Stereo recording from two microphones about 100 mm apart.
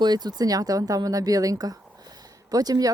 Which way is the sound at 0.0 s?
45° right (ahead or behind).